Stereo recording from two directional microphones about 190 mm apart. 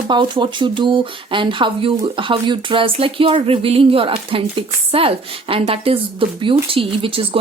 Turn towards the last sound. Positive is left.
turn(degrees=-30)  # may be behind; listen again after turning